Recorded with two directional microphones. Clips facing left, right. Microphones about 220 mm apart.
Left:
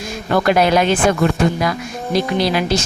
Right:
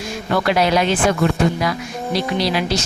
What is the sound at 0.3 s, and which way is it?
Speech, 50° left (ahead or behind).